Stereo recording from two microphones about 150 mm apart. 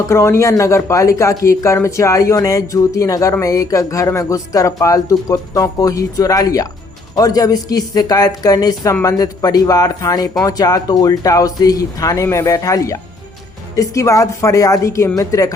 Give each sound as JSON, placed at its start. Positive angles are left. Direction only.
{"t": 0.1, "sound": "speech", "side_deg": 15}